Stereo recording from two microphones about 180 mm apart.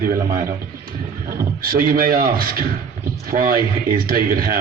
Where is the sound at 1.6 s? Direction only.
55° right (ahead or behind).